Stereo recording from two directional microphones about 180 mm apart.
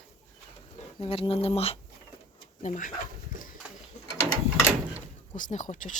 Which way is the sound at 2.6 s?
45° left (ahead or behind).